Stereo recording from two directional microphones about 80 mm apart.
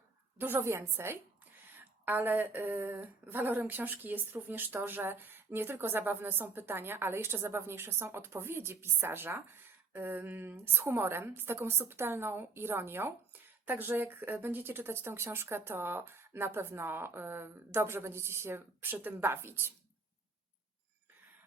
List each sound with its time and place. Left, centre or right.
0.3 s a woman's voice: right